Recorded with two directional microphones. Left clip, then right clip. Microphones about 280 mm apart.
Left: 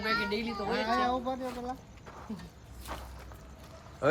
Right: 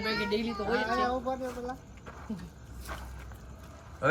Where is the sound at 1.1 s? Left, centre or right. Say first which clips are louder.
Even; left.